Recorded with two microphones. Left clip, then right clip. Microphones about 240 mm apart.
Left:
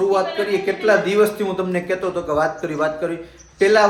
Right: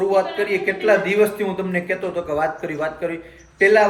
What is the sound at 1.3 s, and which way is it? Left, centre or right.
A man's voice, centre.